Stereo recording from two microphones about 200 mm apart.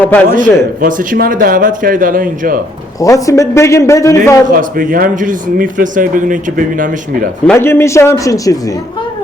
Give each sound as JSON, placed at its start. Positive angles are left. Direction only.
{"t": 0.0, "sound": "a man's voice", "side_deg": 10}
{"t": 0.8, "sound": "speech", "side_deg": -45}
{"t": 3.0, "sound": "a man's voice", "side_deg": 15}
{"t": 4.5, "sound": "speech", "side_deg": -45}
{"t": 7.4, "sound": "a man's voice", "side_deg": 10}